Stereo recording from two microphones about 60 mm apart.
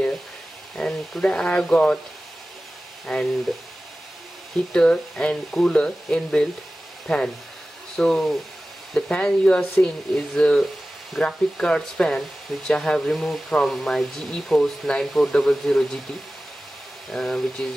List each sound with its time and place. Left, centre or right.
0.7 s speech: centre
3.1 s speech: centre
4.7 s speech: centre
13.1 s speech: centre
17.1 s speech: centre